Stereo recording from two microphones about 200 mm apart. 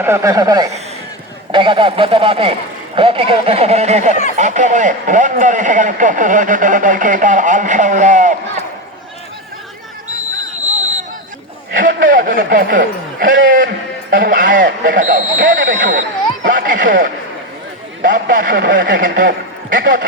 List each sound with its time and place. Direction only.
0.0 s speech: 15° right (ahead or behind); by 8.4 s 40° right (ahead or behind)
11.8 s speech: 45° right (ahead or behind)